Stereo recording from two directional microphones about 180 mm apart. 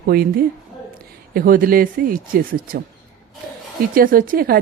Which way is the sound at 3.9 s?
50° right (ahead or behind).